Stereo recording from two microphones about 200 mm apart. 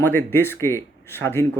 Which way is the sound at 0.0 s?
10° left (ahead or behind).